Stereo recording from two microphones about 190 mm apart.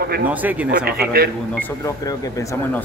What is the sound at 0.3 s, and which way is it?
Speech, 10° right (ahead or behind).